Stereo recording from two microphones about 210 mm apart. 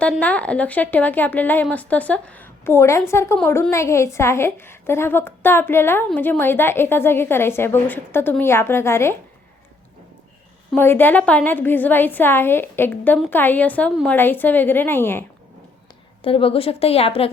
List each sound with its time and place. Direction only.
0.0 s a woman's voice: 5° left (ahead or behind)
10.8 s a woman's voice: 10° left (ahead or behind)
16.2 s a woman's voice: 25° left (ahead or behind)